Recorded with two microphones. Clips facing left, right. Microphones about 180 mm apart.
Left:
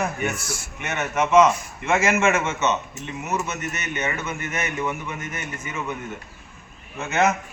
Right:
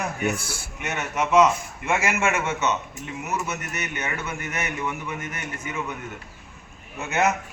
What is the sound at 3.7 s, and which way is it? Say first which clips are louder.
Speech: left 2 dB; 15° right (ahead or behind).